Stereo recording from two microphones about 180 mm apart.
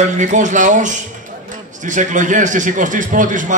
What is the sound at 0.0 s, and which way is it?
A man's voice, 45° right (ahead or behind).